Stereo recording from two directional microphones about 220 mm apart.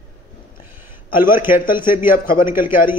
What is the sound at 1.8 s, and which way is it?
A man's voice, 40° left (ahead or behind).